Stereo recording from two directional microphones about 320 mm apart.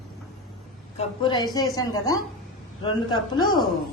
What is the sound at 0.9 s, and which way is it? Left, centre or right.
Speech, centre.